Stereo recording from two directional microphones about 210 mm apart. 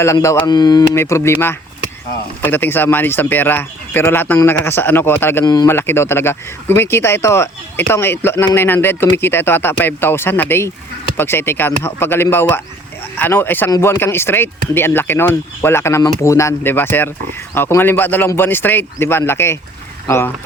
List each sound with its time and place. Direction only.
0.0 s speech: 15° left (ahead or behind)